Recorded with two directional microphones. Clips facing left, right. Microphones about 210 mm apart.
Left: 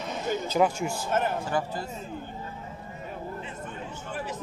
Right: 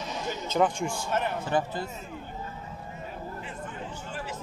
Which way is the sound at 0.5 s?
10° left (ahead or behind).